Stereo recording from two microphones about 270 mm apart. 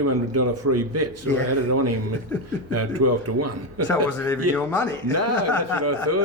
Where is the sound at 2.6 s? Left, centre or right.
Right.